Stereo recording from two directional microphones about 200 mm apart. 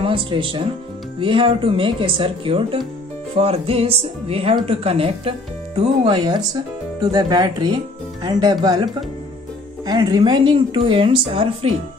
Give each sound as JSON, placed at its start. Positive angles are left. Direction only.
{"t": 0.0, "sound": "speech", "side_deg": -25}